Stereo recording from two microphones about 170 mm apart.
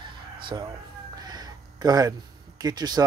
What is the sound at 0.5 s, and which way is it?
Speech, 20° right (ahead or behind).